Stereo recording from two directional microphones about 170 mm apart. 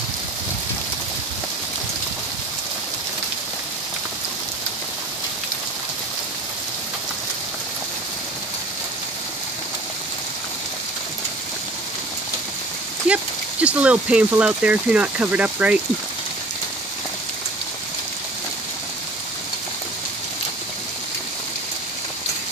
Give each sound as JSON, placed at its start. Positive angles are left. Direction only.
{"t": 13.1, "sound": "speech", "side_deg": -10}